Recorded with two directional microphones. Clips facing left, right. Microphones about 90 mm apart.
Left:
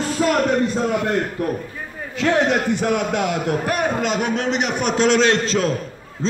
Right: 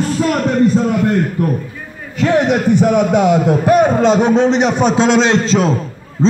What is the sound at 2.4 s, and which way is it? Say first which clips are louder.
A man's voice: right 6 dB; 15° right (ahead or behind).